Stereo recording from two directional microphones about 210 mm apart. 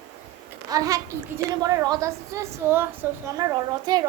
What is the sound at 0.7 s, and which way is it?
A woman's voice, 15° right (ahead or behind).